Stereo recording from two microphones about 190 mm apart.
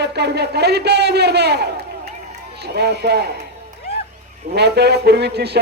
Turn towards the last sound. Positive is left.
turn(degrees=-60)  # may be behind; listen again after turning